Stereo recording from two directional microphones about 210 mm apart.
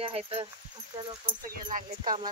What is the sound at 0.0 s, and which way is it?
Speech, 25° right (ahead or behind).